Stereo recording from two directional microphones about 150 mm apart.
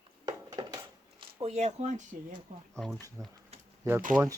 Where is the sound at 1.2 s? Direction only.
40° right (ahead or behind).